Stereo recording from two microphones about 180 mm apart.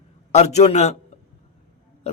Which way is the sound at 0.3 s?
40° left (ahead or behind).